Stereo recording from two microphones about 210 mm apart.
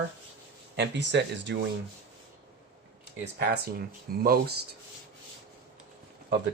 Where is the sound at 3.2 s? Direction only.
50° right (ahead or behind).